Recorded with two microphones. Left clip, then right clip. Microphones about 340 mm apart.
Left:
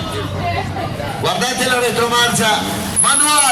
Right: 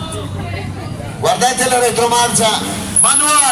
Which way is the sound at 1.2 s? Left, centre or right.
Centre.